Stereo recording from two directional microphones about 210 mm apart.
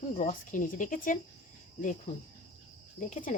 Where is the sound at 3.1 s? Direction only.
35° left (ahead or behind).